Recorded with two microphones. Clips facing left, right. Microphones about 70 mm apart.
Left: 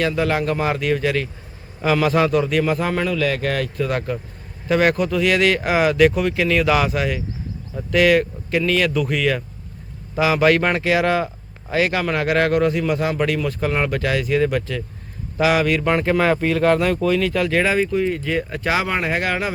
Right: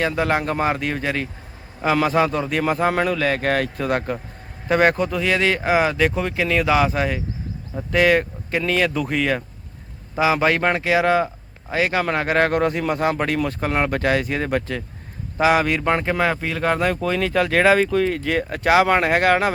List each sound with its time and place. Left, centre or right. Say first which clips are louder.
0.0 s speech: left 1 dB; right
16.0 s speech: left 4 dB; centre
16.7 s speech: left 3 dB; right
17.7 s speech: right 2 dB; right